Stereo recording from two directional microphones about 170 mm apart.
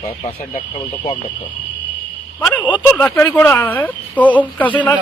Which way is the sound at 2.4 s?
10° left (ahead or behind).